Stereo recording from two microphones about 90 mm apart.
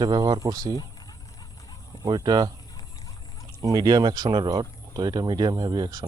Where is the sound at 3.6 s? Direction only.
45° right (ahead or behind).